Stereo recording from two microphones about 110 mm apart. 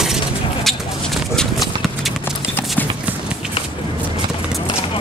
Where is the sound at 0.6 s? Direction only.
Centre (ahead or behind).